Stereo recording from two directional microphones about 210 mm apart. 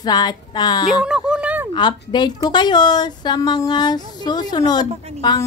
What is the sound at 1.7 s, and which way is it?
Female singing, 20° left (ahead or behind).